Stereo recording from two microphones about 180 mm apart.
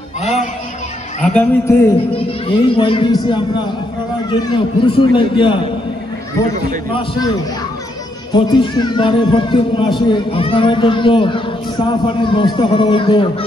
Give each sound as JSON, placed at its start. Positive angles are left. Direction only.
{"t": 1.2, "sound": "a man's voice", "side_deg": 10}
{"t": 2.4, "sound": "speech", "side_deg": 30}
{"t": 6.9, "sound": "speech", "side_deg": 30}
{"t": 8.3, "sound": "speech", "side_deg": 25}